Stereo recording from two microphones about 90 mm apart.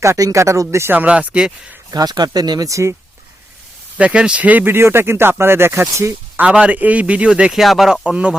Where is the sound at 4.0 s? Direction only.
10° right (ahead or behind).